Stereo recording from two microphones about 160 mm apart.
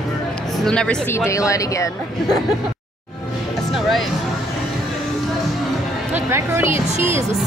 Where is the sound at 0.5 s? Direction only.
5° left (ahead or behind).